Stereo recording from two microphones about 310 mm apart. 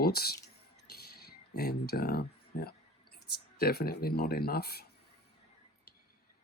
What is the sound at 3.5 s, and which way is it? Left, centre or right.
Speech, left.